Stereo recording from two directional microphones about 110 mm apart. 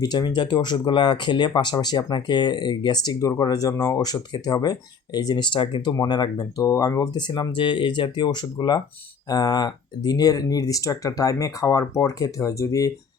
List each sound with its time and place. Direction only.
0.0 s speech: 40° left (ahead or behind)